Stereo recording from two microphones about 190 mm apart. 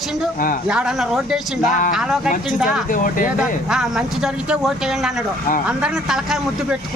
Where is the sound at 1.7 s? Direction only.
45° left (ahead or behind).